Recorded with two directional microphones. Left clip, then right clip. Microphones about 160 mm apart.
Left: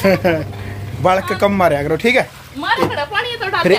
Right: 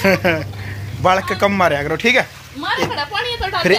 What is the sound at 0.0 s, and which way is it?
Speech, centre (ahead or behind).